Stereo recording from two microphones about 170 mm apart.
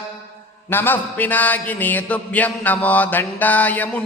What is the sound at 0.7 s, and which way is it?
Mantra, 10° left (ahead or behind).